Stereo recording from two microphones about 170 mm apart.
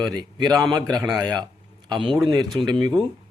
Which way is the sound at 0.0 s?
25° right (ahead or behind).